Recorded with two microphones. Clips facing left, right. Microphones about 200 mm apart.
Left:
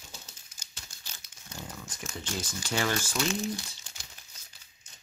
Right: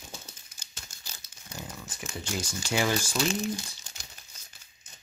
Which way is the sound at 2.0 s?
10° right (ahead or behind).